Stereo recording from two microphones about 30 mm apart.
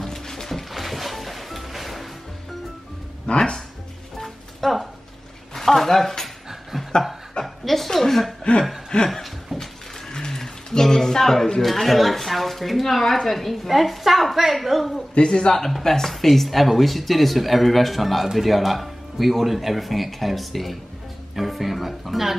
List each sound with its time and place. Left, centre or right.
0.0 s music: centre
0.7 s music: centre
3.3 s speech: left
4.6 s a sound: centre
6.2 s dog: centre
7.4 s chuckle: centre
8.9 s a sound: centre
11.6 s a sound: centre
12.8 s speech: centre
13.7 s a woman's voice: centre
15.2 s speech: left
15.8 s speech: centre
16.1 s speech: centre